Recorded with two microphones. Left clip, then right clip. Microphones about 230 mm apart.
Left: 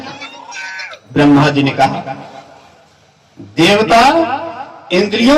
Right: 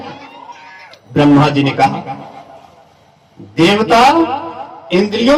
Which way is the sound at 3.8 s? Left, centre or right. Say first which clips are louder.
Right 1 dB; centre.